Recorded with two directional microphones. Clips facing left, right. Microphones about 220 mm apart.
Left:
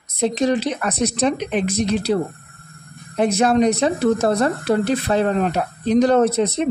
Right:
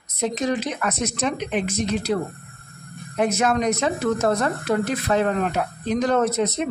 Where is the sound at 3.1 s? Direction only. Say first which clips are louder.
Left 5 dB; 30° left (ahead or behind).